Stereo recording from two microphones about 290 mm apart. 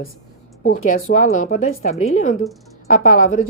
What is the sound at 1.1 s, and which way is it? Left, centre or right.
A woman's voice, left.